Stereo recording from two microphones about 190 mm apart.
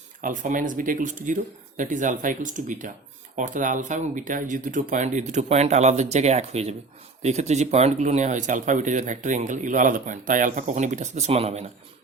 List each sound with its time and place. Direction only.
0.2 s speech: 40° right (ahead or behind)